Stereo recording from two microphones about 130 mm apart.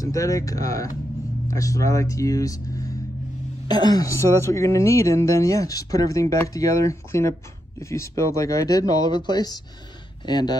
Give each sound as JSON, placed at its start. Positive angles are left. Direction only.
{"t": 0.0, "sound": "a woman's voice", "side_deg": 25}